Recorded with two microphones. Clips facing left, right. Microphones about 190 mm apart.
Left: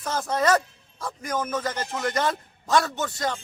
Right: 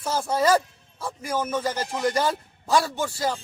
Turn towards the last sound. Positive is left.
turn(degrees=-5)  # may be behind; listen again after turning